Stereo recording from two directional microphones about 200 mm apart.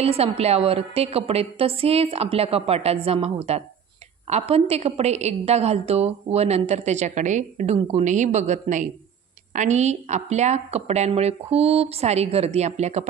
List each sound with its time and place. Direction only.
0.0 s a woman's voice: 30° right (ahead or behind)